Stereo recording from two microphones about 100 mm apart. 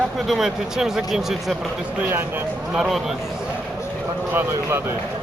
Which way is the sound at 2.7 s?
5° right (ahead or behind).